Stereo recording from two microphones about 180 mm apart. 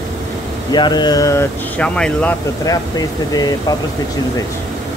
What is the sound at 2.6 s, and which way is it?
Speech, 20° left (ahead or behind).